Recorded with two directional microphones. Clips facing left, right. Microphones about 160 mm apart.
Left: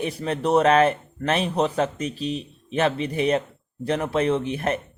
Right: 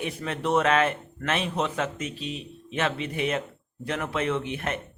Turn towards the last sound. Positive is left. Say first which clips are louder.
# left 5 dB
turn(degrees=35)  # may be behind; listen again after turning